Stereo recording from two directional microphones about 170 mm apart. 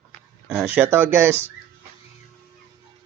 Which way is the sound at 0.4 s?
5° right (ahead or behind).